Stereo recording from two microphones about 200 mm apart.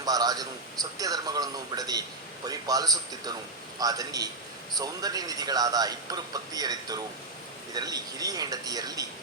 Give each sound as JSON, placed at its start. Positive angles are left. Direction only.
{"t": 0.0, "sound": "a man's voice", "side_deg": -20}